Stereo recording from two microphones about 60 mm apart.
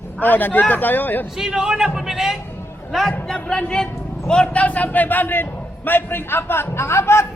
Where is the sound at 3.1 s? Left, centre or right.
Centre.